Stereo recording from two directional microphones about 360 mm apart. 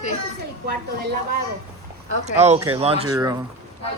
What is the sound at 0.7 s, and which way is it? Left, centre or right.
Speech, right.